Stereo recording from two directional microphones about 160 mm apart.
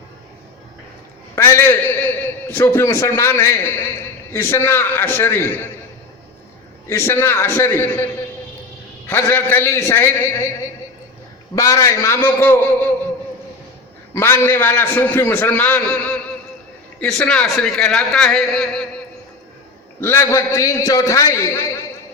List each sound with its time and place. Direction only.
1.4 s a man's voice: 15° left (ahead or behind)
6.8 s a man's voice: 15° left (ahead or behind)
9.0 s a man's voice: 15° left (ahead or behind)
11.5 s a man's voice: 20° left (ahead or behind)
14.1 s a man's voice: 15° left (ahead or behind)
20.0 s a man's voice: 15° left (ahead or behind)